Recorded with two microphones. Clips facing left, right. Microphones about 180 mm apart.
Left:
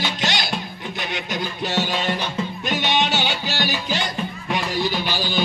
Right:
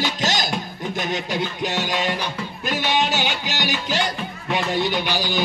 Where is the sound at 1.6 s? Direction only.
15° right (ahead or behind).